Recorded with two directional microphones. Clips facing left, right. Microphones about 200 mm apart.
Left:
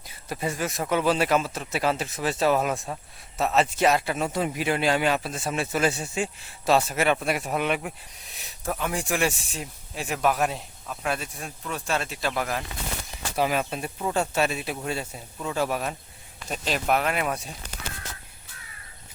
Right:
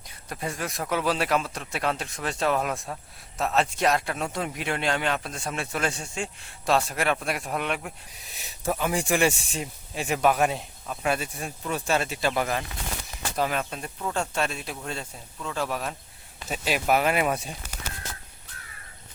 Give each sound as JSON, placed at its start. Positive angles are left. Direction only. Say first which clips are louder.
{"t": 0.1, "sound": "a man's voice", "louder": "left 3 dB", "side_deg": 5}
{"t": 16.5, "sound": "a man's voice", "louder": "right 1 dB", "side_deg": -5}